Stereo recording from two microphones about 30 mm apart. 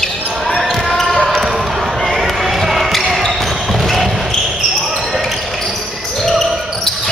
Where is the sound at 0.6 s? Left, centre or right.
Centre.